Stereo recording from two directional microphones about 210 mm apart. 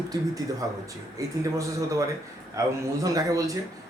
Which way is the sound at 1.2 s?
15° right (ahead or behind).